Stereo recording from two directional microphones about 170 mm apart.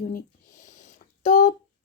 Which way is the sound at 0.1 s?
45° left (ahead or behind).